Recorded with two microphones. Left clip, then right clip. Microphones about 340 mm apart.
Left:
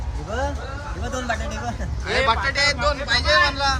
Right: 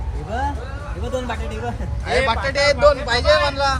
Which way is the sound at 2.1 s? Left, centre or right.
Centre.